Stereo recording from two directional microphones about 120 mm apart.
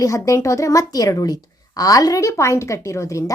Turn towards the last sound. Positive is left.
turn(degrees=25)  # may be behind; listen again after turning